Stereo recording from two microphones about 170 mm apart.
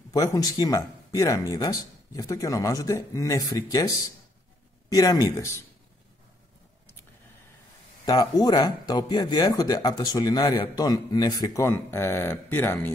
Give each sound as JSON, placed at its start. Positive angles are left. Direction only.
{"t": 0.1, "sound": "speech", "side_deg": 20}
{"t": 8.0, "sound": "speech", "side_deg": 25}